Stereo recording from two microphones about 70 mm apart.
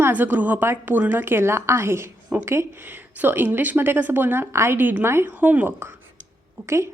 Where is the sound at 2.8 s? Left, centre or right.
Right.